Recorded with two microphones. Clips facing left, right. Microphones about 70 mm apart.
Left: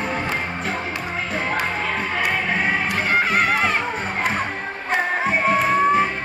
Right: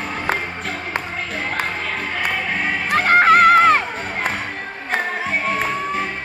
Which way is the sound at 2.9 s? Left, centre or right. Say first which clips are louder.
Right 7 dB; right.